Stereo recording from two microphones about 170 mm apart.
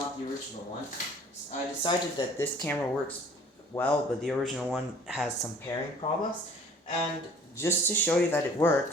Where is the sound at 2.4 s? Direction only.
10° left (ahead or behind).